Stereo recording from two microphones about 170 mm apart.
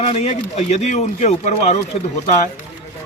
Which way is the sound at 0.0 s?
40° left (ahead or behind).